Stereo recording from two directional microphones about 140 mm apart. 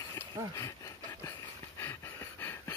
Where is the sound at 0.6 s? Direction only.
25° left (ahead or behind).